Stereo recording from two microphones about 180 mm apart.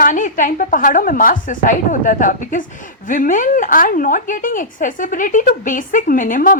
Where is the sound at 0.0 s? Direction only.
45° left (ahead or behind).